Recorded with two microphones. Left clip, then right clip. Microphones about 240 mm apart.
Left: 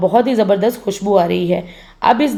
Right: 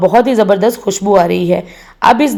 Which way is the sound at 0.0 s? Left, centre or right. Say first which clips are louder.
Right 4 dB; right.